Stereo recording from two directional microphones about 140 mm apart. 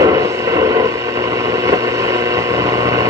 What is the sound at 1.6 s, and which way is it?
Vehicle, 25° right (ahead or behind).